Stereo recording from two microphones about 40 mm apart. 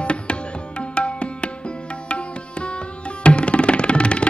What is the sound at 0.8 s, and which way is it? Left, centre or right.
Music, left.